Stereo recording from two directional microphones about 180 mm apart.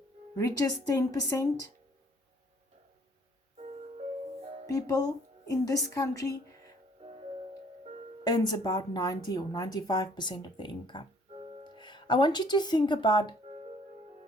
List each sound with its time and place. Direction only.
0.3 s speech: 20° left (ahead or behind)
3.6 s music: 40° right (ahead or behind)
4.6 s speech: 20° left (ahead or behind)
8.2 s speech: 20° left (ahead or behind)